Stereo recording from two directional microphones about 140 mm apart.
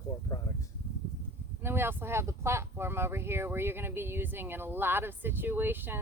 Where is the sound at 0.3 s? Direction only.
25° left (ahead or behind).